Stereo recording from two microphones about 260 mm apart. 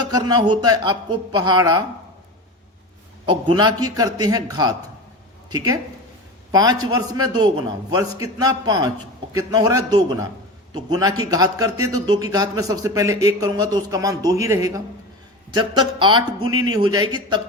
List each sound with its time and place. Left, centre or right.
0.0 s a man's voice: centre
3.2 s a man's voice: centre